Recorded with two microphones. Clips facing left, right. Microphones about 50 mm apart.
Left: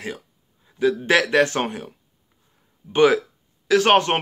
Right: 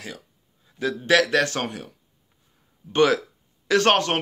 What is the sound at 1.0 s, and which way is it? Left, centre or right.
Speech, left.